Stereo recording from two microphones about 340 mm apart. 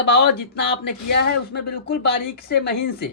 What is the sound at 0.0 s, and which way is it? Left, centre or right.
Speech, left.